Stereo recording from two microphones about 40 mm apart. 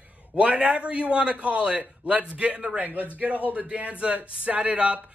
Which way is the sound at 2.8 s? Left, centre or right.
Right.